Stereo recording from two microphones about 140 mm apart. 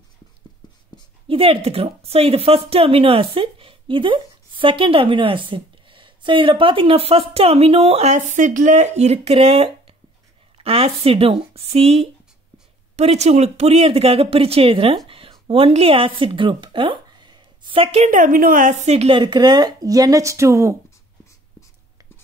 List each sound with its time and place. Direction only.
1.2 s a woman's voice: 40° right (ahead or behind)
15.0 s a sound: 40° right (ahead or behind)
15.4 s speech: 40° right (ahead or behind)
18.0 s speech: 65° right (ahead or behind); by 20.7 s 20° right (ahead or behind)